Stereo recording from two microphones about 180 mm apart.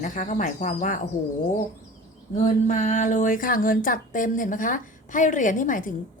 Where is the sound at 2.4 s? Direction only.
45° left (ahead or behind).